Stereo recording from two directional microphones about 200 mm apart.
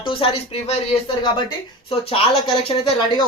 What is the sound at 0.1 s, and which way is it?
Speech, 25° left (ahead or behind).